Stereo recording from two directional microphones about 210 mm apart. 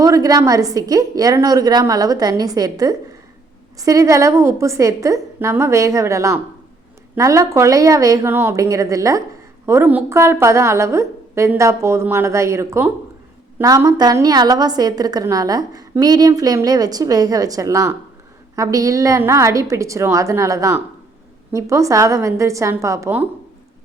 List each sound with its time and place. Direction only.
0.0 s a woman's voice: 15° right (ahead or behind)